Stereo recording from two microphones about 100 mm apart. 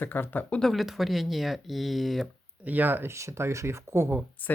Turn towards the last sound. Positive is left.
turn(degrees=20)  # may be behind; listen again after turning